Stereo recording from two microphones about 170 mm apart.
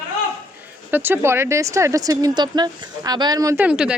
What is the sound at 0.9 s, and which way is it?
Speech, 10° right (ahead or behind).